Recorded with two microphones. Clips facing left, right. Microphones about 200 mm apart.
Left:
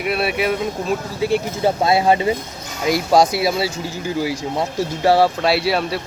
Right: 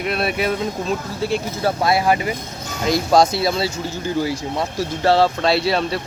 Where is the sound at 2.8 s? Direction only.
10° left (ahead or behind).